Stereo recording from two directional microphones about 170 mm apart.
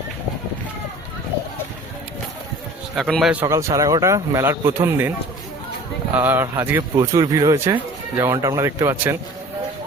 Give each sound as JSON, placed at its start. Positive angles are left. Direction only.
{"t": 2.9, "sound": "a man's voice", "side_deg": 0}
{"t": 3.4, "sound": "speech", "side_deg": -20}
{"t": 6.1, "sound": "speech", "side_deg": -15}